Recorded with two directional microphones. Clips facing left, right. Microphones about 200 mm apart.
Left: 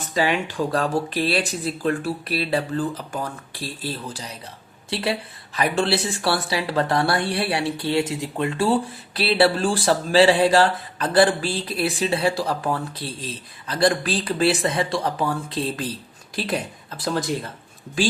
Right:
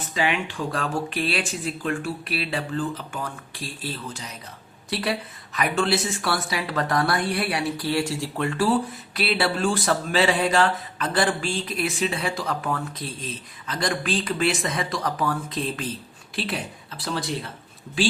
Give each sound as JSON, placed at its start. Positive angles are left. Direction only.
{"t": 0.1, "sound": "a woman's voice", "side_deg": 40}